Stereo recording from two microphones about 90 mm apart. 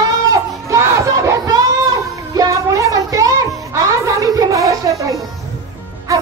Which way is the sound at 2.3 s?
40° right (ahead or behind).